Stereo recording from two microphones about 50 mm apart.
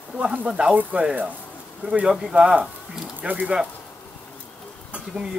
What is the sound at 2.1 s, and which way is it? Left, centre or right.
Speech, centre.